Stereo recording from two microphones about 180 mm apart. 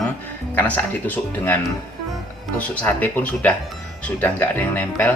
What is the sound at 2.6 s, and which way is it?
Speech, 10° left (ahead or behind).